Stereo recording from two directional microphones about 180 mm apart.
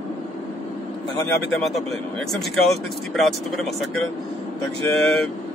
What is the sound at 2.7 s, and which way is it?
Speech, centre (ahead or behind).